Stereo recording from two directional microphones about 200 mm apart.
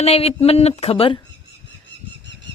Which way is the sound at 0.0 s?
30° left (ahead or behind).